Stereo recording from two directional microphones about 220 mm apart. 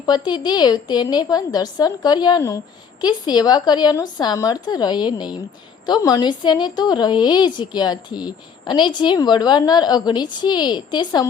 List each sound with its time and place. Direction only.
0.0 s a woman's voice: 20° left (ahead or behind)